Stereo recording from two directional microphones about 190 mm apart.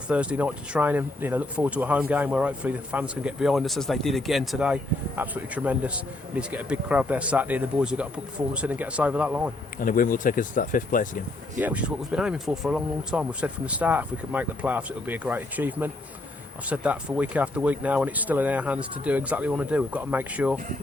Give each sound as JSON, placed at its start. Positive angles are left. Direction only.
{"t": 0.1, "sound": "speech", "side_deg": -5}
{"t": 9.8, "sound": "speech", "side_deg": 45}
{"t": 11.6, "sound": "speech", "side_deg": -5}